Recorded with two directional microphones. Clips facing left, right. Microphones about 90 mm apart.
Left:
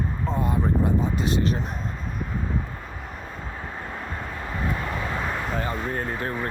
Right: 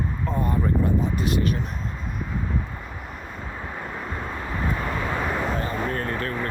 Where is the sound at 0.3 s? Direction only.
20° left (ahead or behind).